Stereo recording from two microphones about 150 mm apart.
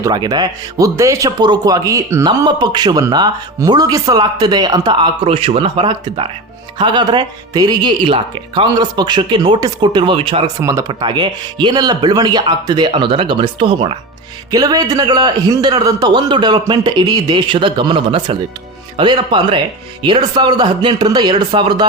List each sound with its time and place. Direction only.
0.0 s speech: 25° right (ahead or behind)
10.6 s speech: 20° right (ahead or behind)